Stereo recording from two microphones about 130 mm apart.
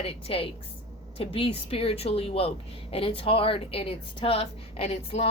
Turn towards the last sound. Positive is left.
turn(degrees=50)  # may be behind; listen again after turning